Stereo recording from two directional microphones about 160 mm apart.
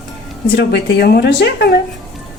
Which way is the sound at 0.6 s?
90° left.